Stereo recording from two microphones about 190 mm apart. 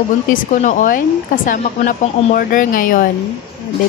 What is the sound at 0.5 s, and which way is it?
A woman's voice, 40° left (ahead or behind).